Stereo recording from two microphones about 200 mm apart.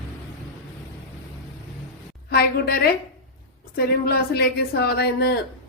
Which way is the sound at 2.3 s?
50° left (ahead or behind).